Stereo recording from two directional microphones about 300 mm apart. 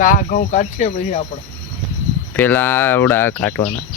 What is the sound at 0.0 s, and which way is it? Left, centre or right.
Speech, left.